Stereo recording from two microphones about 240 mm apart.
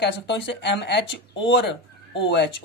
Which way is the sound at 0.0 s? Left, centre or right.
Left.